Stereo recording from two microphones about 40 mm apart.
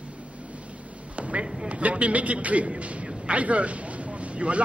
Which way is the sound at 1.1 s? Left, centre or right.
Right.